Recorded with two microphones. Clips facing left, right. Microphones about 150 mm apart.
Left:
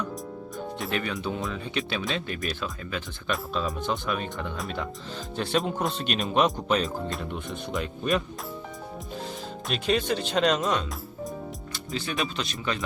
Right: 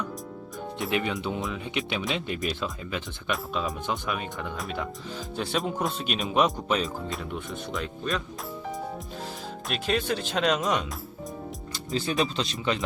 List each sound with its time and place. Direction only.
0.9 s speech: 20° right (ahead or behind); by 8.2 s centre (ahead or behind)
9.6 s speech: centre (ahead or behind)
11.9 s speech: 30° right (ahead or behind)